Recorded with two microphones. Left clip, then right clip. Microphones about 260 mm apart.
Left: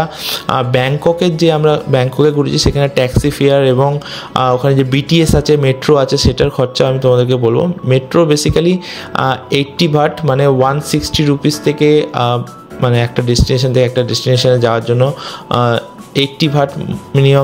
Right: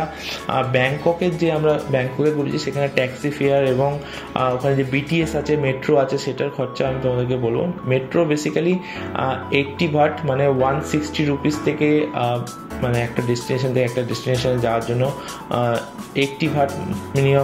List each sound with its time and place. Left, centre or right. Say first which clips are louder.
0.3 s speech: left 5 dB; left